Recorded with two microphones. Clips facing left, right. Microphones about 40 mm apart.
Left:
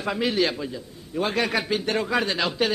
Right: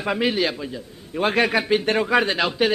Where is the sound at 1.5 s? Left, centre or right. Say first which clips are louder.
Right 4 dB; centre.